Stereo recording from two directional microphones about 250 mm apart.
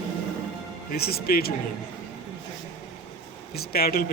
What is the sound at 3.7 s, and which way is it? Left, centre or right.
Speech, left.